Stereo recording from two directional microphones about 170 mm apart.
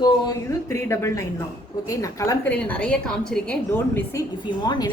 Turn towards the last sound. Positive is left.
turn(degrees=25)  # may be behind; listen again after turning